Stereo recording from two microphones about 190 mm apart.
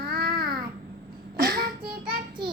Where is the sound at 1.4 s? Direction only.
55° right (ahead or behind).